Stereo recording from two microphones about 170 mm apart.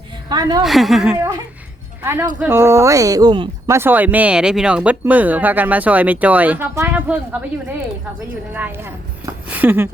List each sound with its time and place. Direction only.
0.3 s a woman's voice: 25° right (ahead or behind)
0.6 s a woman's voice: centre (ahead or behind); by 3.5 s 25° right (ahead or behind)
3.7 s speech: 15° right (ahead or behind)
8.5 s speech: 10° right (ahead or behind)